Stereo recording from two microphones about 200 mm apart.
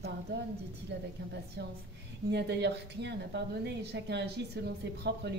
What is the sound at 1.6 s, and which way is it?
A woman's voice, 60° right (ahead or behind).